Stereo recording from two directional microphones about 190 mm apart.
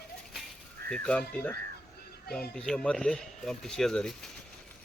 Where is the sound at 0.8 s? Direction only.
50° right (ahead or behind).